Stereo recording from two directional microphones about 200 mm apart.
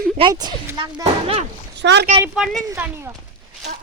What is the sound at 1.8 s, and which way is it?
Speech, 60° right (ahead or behind).